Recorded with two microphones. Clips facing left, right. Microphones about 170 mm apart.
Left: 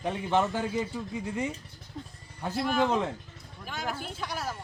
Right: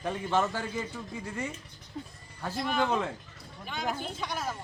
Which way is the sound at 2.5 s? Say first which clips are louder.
Left 3 dB; 5° left (ahead or behind).